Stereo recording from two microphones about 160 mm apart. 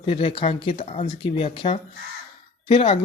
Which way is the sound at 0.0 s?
35° left (ahead or behind).